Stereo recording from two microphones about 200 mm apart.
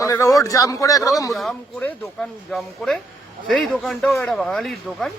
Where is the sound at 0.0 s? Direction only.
15° left (ahead or behind).